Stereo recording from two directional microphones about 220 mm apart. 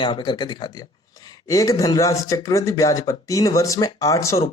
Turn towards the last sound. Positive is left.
turn(degrees=15)  # may be behind; listen again after turning